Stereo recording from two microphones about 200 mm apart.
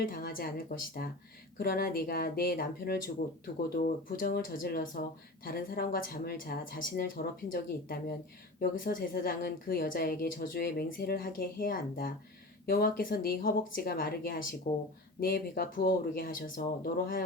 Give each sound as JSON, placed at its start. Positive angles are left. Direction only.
{"t": 0.0, "sound": "a woman's voice", "side_deg": 45}